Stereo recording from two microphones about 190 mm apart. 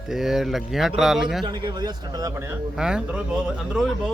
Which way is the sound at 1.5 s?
25° right (ahead or behind).